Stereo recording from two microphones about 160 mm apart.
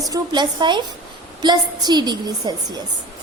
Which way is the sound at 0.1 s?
25° right (ahead or behind).